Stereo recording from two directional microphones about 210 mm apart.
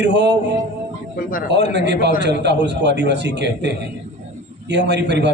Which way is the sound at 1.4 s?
55° right (ahead or behind).